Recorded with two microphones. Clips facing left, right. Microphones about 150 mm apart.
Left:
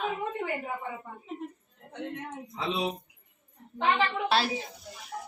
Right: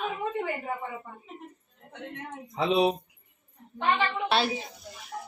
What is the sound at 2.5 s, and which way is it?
Speech, 65° right (ahead or behind).